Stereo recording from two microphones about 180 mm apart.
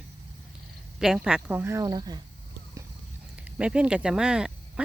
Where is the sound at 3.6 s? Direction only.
5° right (ahead or behind).